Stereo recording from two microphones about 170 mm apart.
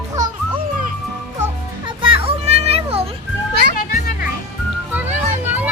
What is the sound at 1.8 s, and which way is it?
Children playing, 30° right (ahead or behind).